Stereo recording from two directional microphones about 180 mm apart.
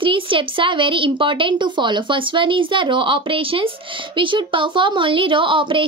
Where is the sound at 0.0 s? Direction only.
30° right (ahead or behind).